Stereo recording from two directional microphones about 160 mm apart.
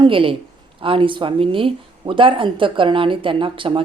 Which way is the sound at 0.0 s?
35° right (ahead or behind).